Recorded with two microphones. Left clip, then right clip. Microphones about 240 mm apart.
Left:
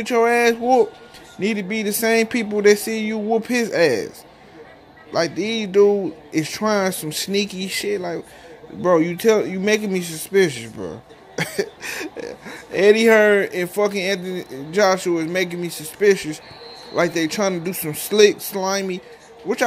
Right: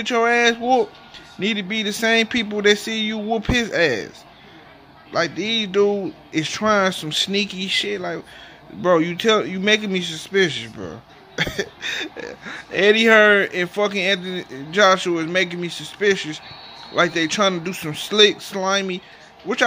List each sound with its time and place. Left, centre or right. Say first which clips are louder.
0.0 s speech: left 1 dB; centre
2.8 s a sound: right 1 dB; right
3.1 s speech: left 3 dB; centre
5.1 s a man's voice: even; centre